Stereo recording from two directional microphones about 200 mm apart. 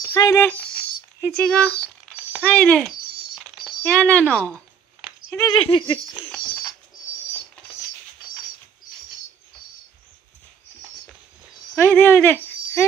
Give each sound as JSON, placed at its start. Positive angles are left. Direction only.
{"t": 0.1, "sound": "speech", "side_deg": 15}
{"t": 3.3, "sound": "a sound", "side_deg": 0}
{"t": 5.5, "sound": "speech", "side_deg": 25}
{"t": 11.7, "sound": "speech", "side_deg": 10}